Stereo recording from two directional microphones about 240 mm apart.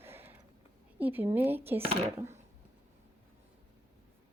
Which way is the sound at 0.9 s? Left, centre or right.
Centre.